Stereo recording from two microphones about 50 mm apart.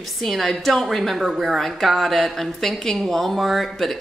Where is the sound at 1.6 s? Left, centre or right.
Centre.